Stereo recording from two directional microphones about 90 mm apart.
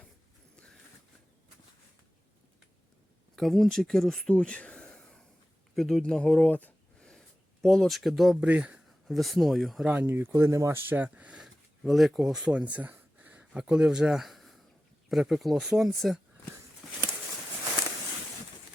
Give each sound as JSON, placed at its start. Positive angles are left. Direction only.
{"t": 0.5, "sound": "a sound", "side_deg": 10}
{"t": 3.3, "sound": "speech", "side_deg": 0}
{"t": 6.5, "sound": "speech", "side_deg": 20}
{"t": 7.6, "sound": "speech", "side_deg": 5}
{"t": 8.4, "sound": "speech", "side_deg": -15}
{"t": 8.9, "sound": "speech", "side_deg": 0}
{"t": 9.9, "sound": "speech", "side_deg": -20}
{"t": 11.4, "sound": "a sound", "side_deg": 0}
{"t": 13.4, "sound": "speech", "side_deg": -10}